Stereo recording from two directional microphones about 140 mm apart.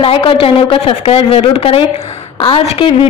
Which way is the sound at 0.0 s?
40° left (ahead or behind).